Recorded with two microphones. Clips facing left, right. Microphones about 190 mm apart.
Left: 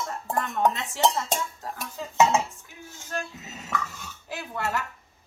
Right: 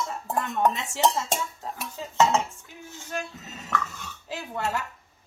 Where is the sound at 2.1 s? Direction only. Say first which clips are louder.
Left 1 dB; 10° left (ahead or behind).